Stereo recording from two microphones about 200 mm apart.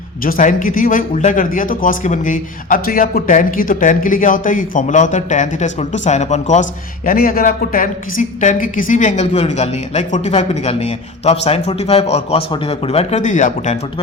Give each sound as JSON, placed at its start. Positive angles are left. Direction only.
{"t": 0.3, "sound": "speech", "side_deg": 45}